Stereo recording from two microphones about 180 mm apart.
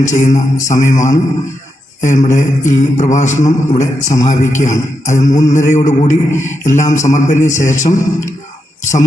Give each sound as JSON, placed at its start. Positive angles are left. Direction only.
{"t": 0.0, "sound": "a man's voice", "side_deg": 45}